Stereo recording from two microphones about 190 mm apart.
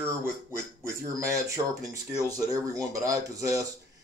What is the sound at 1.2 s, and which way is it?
Speech, 15° right (ahead or behind).